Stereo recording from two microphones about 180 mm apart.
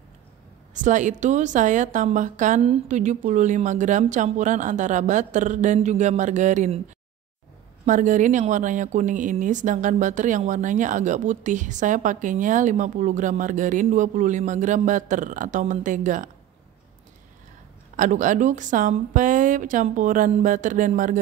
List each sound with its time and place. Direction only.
0.7 s speech: 45° right (ahead or behind)
7.8 s speech: 45° right (ahead or behind)
17.9 s speech: 45° right (ahead or behind)